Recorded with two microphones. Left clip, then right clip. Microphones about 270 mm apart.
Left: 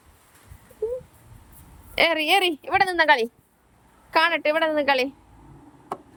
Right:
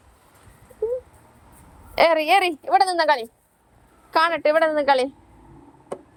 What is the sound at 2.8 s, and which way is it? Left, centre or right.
Speech, left.